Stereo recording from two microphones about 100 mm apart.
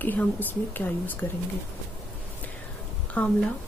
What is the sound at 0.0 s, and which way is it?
Speech, 20° left (ahead or behind).